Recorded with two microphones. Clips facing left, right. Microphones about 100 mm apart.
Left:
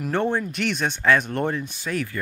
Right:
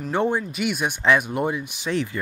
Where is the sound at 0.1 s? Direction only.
15° right (ahead or behind).